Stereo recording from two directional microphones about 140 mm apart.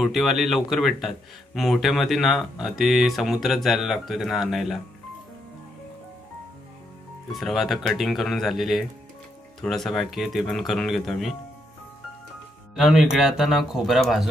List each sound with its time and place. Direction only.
0.0 s speech: centre (ahead or behind)
7.3 s speech: centre (ahead or behind)
12.7 s speech: 5° right (ahead or behind)